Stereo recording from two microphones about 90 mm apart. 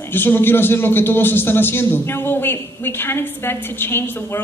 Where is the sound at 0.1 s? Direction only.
25° left (ahead or behind).